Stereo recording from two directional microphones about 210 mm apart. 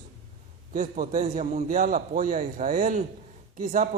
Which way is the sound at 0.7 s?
40° right (ahead or behind).